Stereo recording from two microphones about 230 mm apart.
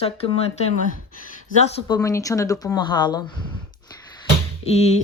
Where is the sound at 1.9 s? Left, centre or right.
Centre.